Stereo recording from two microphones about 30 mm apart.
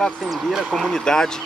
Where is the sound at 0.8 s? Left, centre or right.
Centre.